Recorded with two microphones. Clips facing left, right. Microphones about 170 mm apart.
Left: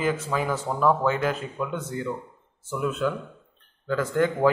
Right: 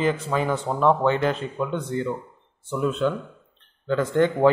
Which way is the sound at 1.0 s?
5° left (ahead or behind).